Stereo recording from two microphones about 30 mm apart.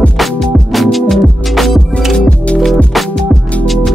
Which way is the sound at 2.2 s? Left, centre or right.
Left.